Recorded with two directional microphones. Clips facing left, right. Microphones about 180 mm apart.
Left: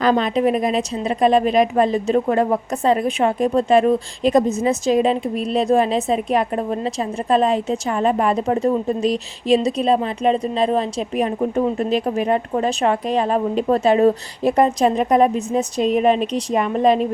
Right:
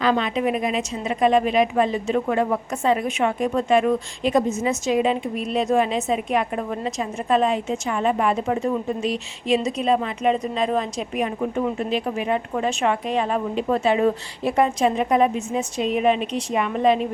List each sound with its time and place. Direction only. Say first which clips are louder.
0.0 s a woman's voice: left 4 dB; 40° left (ahead or behind)